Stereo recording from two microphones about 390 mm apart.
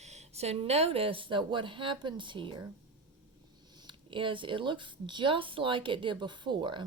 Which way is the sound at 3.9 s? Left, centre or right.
Centre.